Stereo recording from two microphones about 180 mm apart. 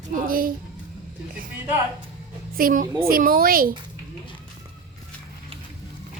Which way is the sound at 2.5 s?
50° right (ahead or behind).